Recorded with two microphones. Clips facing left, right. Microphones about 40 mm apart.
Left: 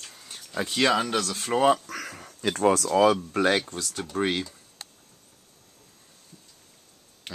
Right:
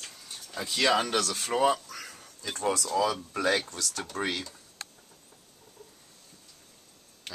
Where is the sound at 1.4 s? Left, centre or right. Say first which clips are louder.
Left 5 dB; left.